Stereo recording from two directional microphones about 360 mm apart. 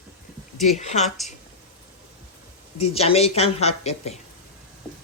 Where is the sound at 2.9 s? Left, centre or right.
Centre.